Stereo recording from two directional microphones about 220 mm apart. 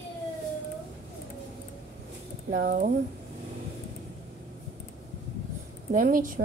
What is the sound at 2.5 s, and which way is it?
Speech, 40° right (ahead or behind).